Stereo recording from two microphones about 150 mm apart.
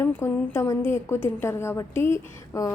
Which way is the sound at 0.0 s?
15° left (ahead or behind).